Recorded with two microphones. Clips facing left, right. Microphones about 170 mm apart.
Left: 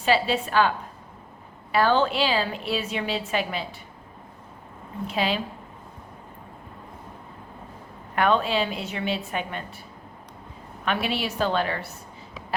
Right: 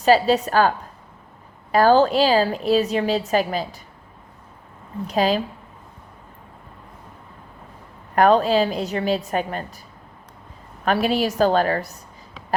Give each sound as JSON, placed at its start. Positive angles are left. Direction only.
{"t": 0.0, "sound": "a woman's voice", "side_deg": -40}
{"t": 1.7, "sound": "a woman's voice", "side_deg": -40}
{"t": 5.0, "sound": "a woman's voice", "side_deg": -40}
{"t": 8.1, "sound": "a woman's voice", "side_deg": -40}
{"t": 10.8, "sound": "a woman's voice", "side_deg": -40}